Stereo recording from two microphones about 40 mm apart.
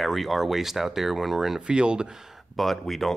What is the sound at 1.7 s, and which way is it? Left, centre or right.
Speech, right.